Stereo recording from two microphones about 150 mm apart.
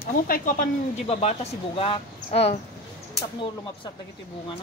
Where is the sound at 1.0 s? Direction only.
45° left (ahead or behind).